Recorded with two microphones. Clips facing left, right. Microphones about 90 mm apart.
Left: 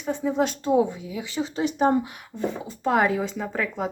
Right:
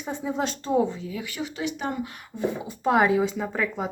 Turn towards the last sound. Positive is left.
turn(degrees=-5)  # may be behind; listen again after turning